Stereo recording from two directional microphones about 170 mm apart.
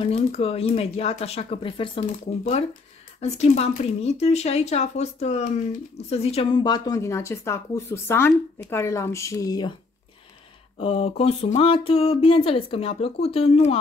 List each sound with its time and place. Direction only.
0.0 s speech: 35° left (ahead or behind)
3.2 s a woman's voice: 40° left (ahead or behind); by 9.8 s 25° left (ahead or behind)
10.8 s speech: 35° left (ahead or behind)